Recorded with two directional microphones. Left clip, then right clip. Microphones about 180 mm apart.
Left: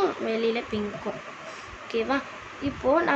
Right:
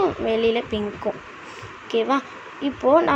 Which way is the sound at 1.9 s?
25° right (ahead or behind).